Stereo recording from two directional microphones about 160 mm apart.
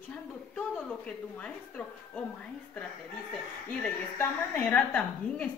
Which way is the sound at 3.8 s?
10° left (ahead or behind).